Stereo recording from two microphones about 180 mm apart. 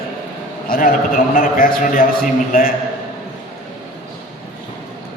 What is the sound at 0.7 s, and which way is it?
A man's voice, 50° left (ahead or behind).